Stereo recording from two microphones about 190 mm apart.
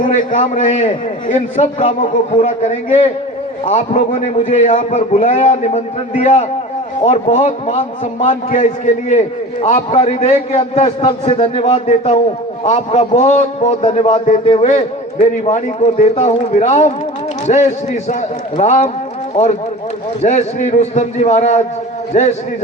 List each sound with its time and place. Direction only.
0.0 s a man's voice: 45° left (ahead or behind)
20.2 s a man's voice: 40° left (ahead or behind)